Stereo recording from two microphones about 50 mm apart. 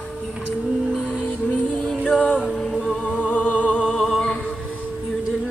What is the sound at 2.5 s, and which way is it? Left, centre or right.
Humming, centre.